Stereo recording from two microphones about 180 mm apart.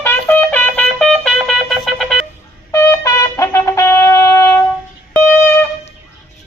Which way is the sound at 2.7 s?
15° left (ahead or behind).